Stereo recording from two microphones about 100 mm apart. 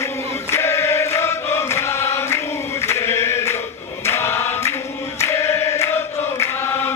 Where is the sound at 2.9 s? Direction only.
25° left (ahead or behind).